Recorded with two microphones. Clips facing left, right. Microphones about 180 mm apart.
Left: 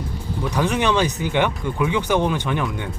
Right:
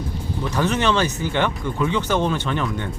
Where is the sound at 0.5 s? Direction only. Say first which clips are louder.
Even; 10° left (ahead or behind).